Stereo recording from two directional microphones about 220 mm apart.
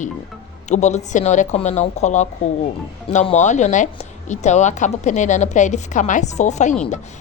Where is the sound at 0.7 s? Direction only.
30° left (ahead or behind).